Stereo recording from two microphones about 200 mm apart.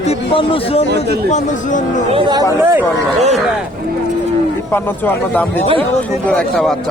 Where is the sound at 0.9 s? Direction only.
55° right (ahead or behind).